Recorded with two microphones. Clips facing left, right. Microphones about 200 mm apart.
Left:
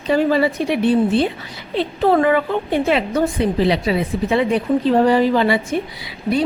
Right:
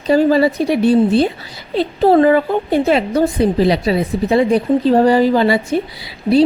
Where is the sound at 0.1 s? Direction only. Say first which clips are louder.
Right 4 dB; 40° right (ahead or behind).